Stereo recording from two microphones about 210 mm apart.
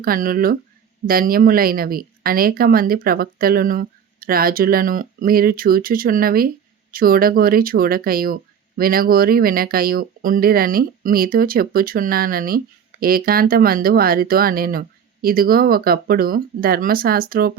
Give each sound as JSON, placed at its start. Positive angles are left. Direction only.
{"t": 0.0, "sound": "speech", "side_deg": -45}